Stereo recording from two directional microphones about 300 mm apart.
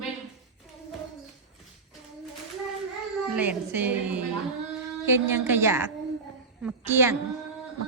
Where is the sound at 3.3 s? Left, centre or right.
Centre.